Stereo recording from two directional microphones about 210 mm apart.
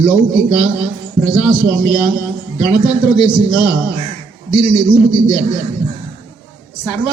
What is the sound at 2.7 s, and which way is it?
A man's voice, 20° left (ahead or behind).